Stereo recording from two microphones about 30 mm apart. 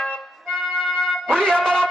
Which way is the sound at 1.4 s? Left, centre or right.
Left.